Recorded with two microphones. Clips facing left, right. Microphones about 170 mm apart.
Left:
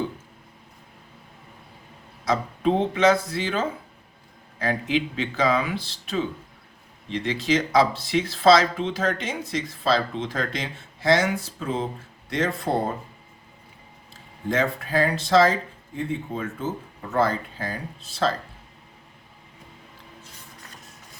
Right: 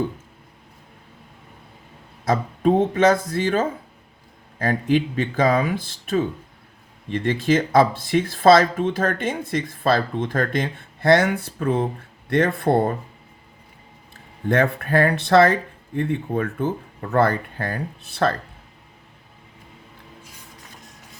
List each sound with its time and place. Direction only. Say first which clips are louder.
2.2 s speech: right 3 dB; 45° right (ahead or behind)
14.5 s speech: right 4 dB; 60° right (ahead or behind)